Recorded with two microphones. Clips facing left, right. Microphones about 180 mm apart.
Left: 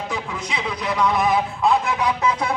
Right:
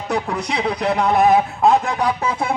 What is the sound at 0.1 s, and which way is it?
Speech, 70° right (ahead or behind).